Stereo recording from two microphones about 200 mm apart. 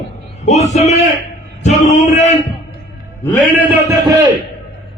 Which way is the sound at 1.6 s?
35° left (ahead or behind).